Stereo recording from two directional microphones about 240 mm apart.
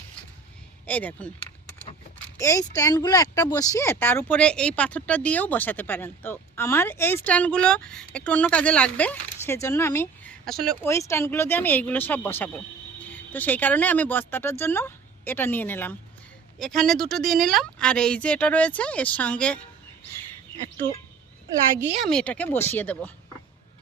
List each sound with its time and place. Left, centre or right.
0.9 s a woman's voice: centre
1.4 s keys jangling: left
2.4 s a woman's voice: centre
21.9 s a woman's voice: centre